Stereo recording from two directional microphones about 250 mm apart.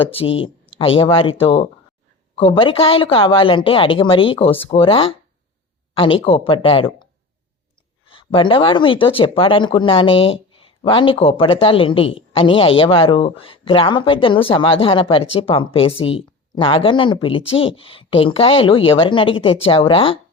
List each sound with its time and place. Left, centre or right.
0.0 s speech: left
8.0 s speech: left